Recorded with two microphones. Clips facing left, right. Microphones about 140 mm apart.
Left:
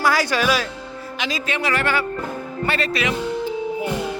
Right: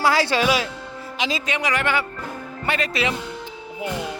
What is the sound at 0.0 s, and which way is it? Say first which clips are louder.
Speech: even; 25° right (ahead or behind).